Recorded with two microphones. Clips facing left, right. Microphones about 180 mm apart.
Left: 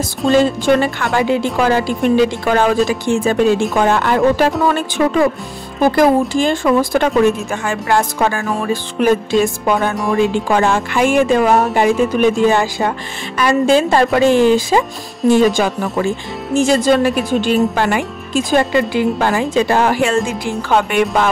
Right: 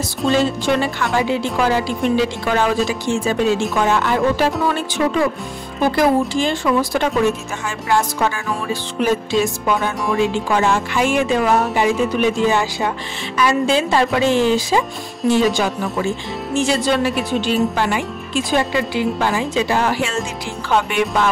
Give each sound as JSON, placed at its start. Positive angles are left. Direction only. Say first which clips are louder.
{"t": 0.3, "sound": "speech", "louder": "left 5 dB", "side_deg": 50}